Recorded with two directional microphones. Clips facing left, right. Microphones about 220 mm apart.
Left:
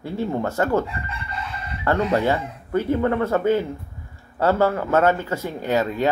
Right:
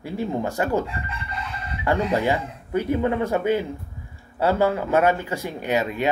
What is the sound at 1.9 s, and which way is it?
Speech, 15° right (ahead or behind).